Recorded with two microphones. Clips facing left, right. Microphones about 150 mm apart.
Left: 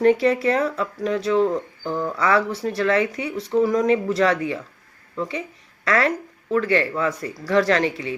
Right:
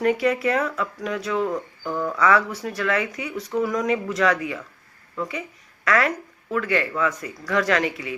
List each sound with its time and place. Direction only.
0.0 s speech: 30° left (ahead or behind)